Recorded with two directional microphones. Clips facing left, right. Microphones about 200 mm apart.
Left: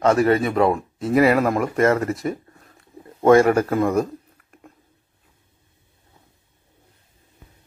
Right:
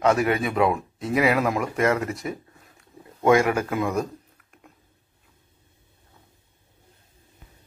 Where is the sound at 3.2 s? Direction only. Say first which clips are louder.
Left 5 dB; 45° left (ahead or behind).